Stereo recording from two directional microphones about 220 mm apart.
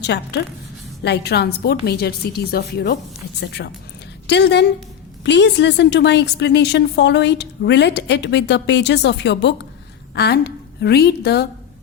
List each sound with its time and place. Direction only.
0.0 s a woman's voice: 50° left (ahead or behind)